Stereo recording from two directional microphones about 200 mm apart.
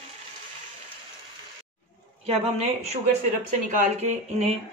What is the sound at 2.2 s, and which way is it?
A woman's voice, 30° right (ahead or behind).